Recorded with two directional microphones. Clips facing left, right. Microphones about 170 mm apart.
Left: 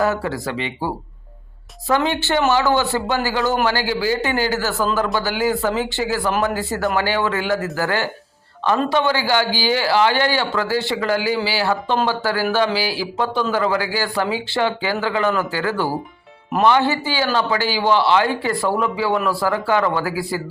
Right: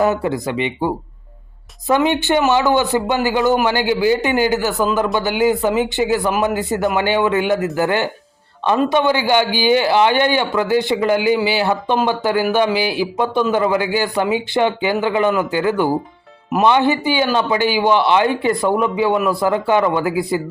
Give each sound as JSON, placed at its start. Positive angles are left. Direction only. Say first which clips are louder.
{"t": 0.0, "sound": "speech", "louder": "right 3 dB", "side_deg": -20}
{"t": 1.9, "sound": "speech", "louder": "right 4 dB", "side_deg": -15}